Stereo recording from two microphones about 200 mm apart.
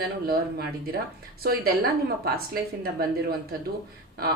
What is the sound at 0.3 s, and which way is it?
Speech, 50° right (ahead or behind).